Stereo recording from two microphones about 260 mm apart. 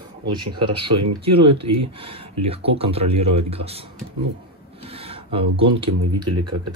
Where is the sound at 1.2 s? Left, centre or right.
Right.